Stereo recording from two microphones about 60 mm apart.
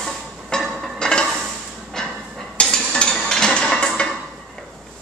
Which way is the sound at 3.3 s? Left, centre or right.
Centre.